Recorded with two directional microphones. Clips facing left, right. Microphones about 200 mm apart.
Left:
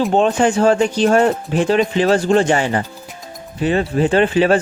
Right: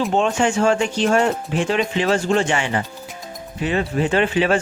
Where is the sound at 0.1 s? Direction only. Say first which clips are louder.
Left 4 dB; 35° left (ahead or behind).